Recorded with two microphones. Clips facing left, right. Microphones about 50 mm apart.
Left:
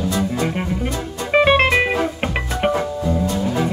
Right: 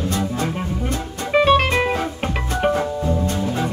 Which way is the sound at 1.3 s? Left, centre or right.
Left.